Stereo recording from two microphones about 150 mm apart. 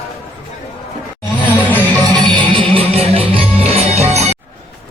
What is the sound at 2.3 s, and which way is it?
Music, 35° right (ahead or behind).